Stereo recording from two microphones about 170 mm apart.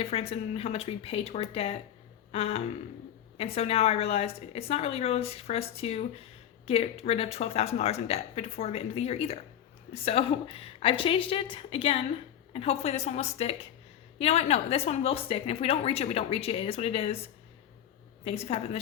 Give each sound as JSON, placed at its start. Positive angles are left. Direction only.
{"t": 0.0, "sound": "a woman's voice", "side_deg": 35}
{"t": 18.3, "sound": "a woman's voice", "side_deg": 35}